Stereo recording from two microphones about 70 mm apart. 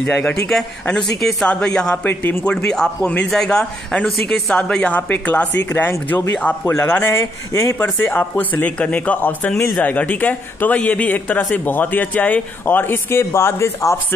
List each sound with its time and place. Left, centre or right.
0.0 s a man's voice: centre
0.3 s speech: centre
2.0 s speech: left
2.4 s a man's voice: centre; by 13.9 s left